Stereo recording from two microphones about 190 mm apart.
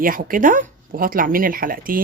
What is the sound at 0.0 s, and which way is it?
Speech, 45° right (ahead or behind).